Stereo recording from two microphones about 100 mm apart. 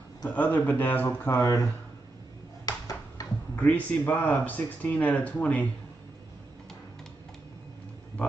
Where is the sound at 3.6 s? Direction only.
15° left (ahead or behind).